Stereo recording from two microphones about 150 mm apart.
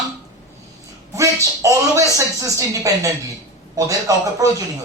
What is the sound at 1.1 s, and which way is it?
A woman's voice, 20° right (ahead or behind).